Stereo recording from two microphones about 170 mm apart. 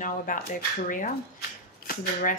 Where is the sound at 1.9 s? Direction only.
55° left (ahead or behind).